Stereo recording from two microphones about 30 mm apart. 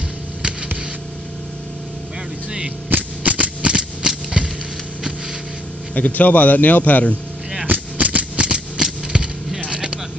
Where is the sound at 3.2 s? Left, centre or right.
Right.